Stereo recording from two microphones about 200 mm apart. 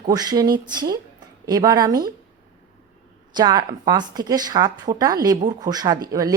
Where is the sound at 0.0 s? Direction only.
20° right (ahead or behind).